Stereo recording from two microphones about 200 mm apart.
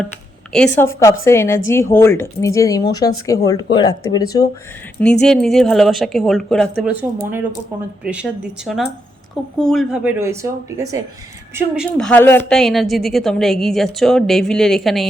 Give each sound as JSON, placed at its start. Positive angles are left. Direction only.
{"t": 0.5, "sound": "a woman's voice", "side_deg": 10}
{"t": 5.2, "sound": "a woman's voice", "side_deg": 0}
{"t": 11.5, "sound": "a woman's voice", "side_deg": -5}